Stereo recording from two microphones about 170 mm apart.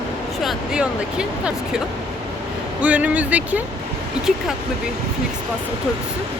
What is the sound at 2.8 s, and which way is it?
Speech, 10° right (ahead or behind).